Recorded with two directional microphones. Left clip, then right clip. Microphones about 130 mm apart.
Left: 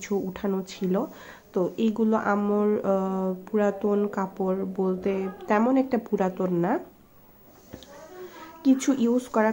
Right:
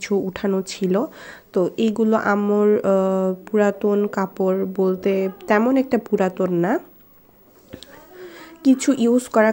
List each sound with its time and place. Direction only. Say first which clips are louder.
0.0 s speech: right 7 dB; 45° right (ahead or behind)
8.2 s speech: right 6 dB; 40° right (ahead or behind)